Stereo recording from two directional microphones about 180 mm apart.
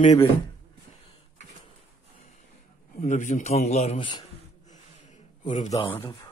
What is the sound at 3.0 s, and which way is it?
A man's voice, 45° left (ahead or behind).